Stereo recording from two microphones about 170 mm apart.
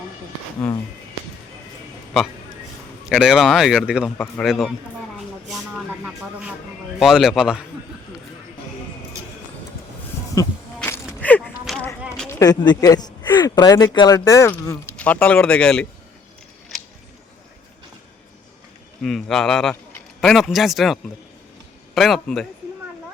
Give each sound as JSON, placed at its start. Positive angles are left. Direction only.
{"t": 3.1, "sound": "speech", "side_deg": -5}
{"t": 5.5, "sound": "vehicle", "side_deg": -5}
{"t": 7.0, "sound": "speech", "side_deg": 0}
{"t": 10.4, "sound": "speech", "side_deg": 20}
{"t": 10.8, "sound": "a sound", "side_deg": 15}
{"t": 12.3, "sound": "speech", "side_deg": 20}
{"t": 19.0, "sound": "speech", "side_deg": 0}